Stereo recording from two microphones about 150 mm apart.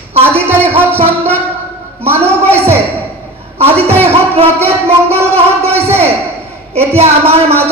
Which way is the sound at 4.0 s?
40° right (ahead or behind).